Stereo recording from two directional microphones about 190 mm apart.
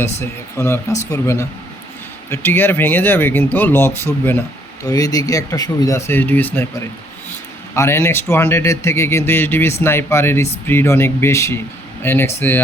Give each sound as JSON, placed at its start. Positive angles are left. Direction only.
{"t": 0.0, "sound": "speech", "side_deg": 15}